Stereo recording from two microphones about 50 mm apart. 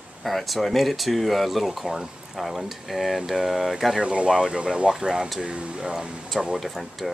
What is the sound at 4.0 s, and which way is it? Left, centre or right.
Speech, right.